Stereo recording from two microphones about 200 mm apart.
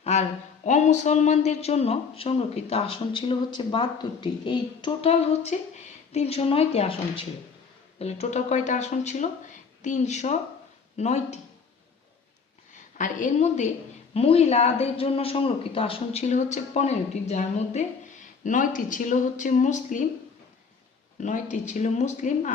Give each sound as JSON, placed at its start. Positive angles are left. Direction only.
{"t": 0.0, "sound": "speech", "side_deg": 35}
{"t": 7.9, "sound": "speech", "side_deg": 35}
{"t": 12.7, "sound": "a woman's voice", "side_deg": 40}
{"t": 21.2, "sound": "speech", "side_deg": 40}